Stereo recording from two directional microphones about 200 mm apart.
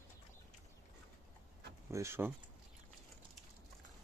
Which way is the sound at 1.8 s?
15° right (ahead or behind).